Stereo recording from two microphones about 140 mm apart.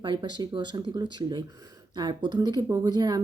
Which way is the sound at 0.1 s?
35° right (ahead or behind).